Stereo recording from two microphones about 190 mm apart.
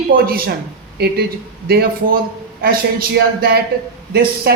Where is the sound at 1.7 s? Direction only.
55° right (ahead or behind).